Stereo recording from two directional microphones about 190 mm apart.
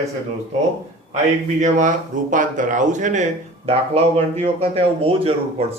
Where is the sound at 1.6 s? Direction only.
40° right (ahead or behind).